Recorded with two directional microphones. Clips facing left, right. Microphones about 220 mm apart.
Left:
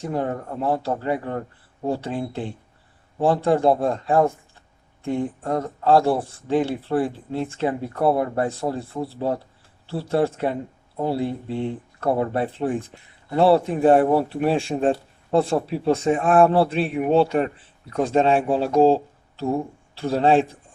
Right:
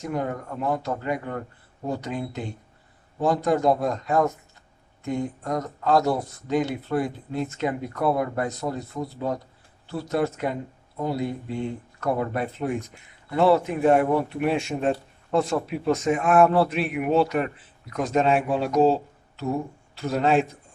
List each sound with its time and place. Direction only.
0.0 s speech: 30° left (ahead or behind)